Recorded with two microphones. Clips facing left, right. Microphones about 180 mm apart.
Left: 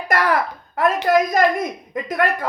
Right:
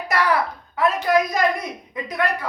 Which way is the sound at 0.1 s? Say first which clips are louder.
Left 2 dB; 50° left (ahead or behind).